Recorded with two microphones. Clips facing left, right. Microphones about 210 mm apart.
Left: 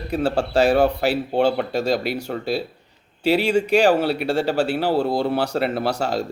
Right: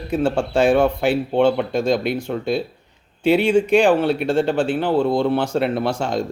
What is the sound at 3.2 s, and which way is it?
Speech, 55° right (ahead or behind).